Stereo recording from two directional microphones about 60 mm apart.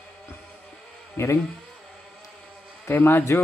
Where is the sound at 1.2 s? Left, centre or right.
Left.